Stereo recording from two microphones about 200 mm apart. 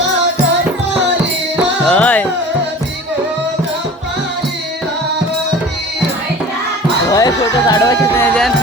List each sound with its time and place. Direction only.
1.8 s music: 5° left (ahead or behind)
7.1 s speech: 20° left (ahead or behind)